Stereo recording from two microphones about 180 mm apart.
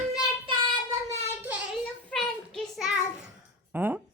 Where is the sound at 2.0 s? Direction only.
5° left (ahead or behind).